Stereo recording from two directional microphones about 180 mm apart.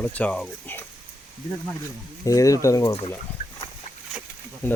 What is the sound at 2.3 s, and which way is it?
Speech, 20° left (ahead or behind).